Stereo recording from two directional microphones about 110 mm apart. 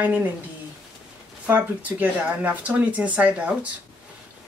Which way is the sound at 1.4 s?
15° right (ahead or behind).